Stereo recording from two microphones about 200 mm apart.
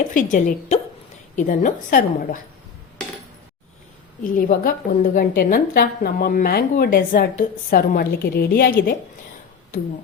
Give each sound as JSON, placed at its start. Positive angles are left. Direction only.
{"t": 0.1, "sound": "a woman's voice", "side_deg": 40}
{"t": 4.2, "sound": "a woman's voice", "side_deg": 45}